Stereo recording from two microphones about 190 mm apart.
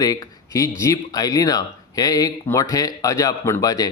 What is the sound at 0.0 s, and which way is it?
A man's voice, 20° left (ahead or behind).